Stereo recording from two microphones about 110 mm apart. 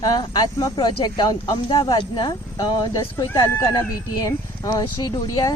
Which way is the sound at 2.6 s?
35° left (ahead or behind).